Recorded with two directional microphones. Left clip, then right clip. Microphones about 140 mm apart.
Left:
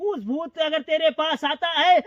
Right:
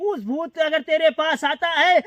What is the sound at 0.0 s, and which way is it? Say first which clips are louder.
Speech: right 2 dB; 65° right (ahead or behind).